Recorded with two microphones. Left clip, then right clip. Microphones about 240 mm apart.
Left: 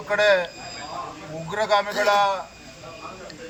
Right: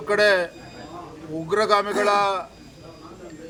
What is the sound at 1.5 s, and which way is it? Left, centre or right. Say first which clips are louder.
Speech: right 2 dB; centre.